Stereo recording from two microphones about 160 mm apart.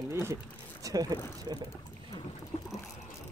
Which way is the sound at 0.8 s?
25° right (ahead or behind).